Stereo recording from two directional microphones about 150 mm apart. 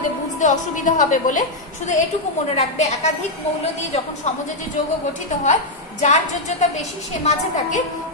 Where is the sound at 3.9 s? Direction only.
45° left (ahead or behind).